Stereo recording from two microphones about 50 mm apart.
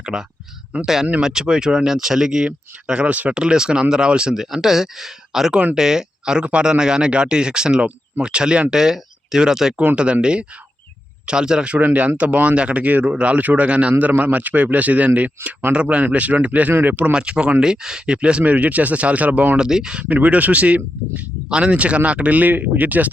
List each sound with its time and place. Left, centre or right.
0.0 s a sound: centre
0.7 s speech: right
1.2 s speech: centre
9.7 s speech: right
11.8 s speech: right
17.1 s speech: centre
19.5 s speech: centre
20.0 s speech: right